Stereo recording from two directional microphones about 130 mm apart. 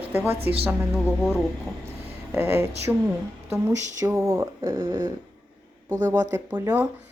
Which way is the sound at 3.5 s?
20° right (ahead or behind).